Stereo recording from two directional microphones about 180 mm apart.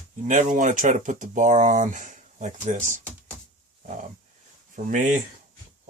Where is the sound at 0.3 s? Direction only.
45° right (ahead or behind).